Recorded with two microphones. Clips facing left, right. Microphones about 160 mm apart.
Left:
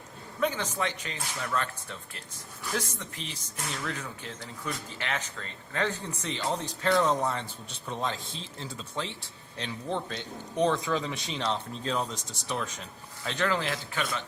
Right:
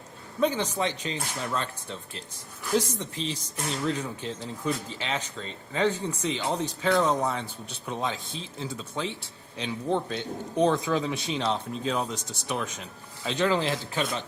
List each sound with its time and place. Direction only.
0.3 s a man's voice: 25° right (ahead or behind)